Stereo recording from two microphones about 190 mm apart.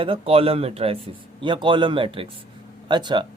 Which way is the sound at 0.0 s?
30° right (ahead or behind).